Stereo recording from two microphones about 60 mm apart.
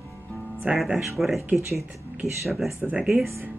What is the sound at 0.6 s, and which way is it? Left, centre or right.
Speech, right.